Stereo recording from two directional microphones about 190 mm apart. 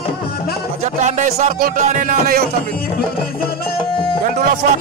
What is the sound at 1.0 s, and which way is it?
Music, 40° right (ahead or behind).